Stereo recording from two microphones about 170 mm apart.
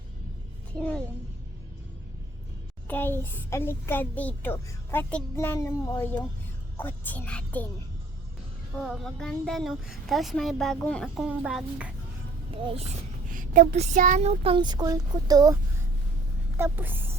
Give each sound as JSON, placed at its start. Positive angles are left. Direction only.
{"t": 0.8, "sound": "a child's voice", "side_deg": 5}
{"t": 2.8, "sound": "a child's voice", "side_deg": 10}
{"t": 8.8, "sound": "speech", "side_deg": 0}
{"t": 13.3, "sound": "speech", "side_deg": -50}
{"t": 16.6, "sound": "speech", "side_deg": -15}